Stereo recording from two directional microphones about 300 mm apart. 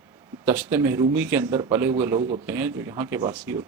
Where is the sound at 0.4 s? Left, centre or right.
Centre.